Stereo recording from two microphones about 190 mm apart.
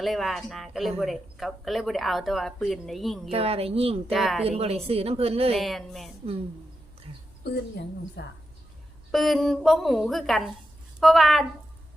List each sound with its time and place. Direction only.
0.0 s speech: centre (ahead or behind)
3.3 s speech: 30° right (ahead or behind)
4.1 s speech: centre (ahead or behind)
4.4 s speech: 30° right (ahead or behind)
5.5 s speech: centre (ahead or behind)
7.4 s a woman's voice: 60° left (ahead or behind)
9.1 s speech: centre (ahead or behind)